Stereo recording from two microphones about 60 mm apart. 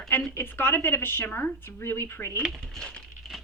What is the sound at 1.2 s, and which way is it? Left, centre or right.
Speech, left.